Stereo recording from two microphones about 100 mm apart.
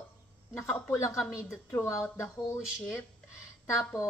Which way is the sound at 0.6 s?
25° left (ahead or behind).